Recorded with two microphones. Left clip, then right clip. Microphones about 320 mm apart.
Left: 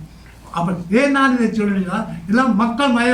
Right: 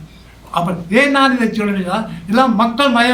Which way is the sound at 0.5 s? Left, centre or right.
Centre.